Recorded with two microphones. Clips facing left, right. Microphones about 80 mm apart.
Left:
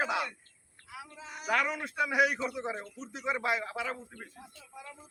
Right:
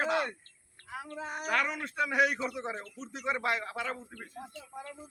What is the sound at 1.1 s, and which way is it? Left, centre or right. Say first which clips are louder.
Speech: right 7 dB; right.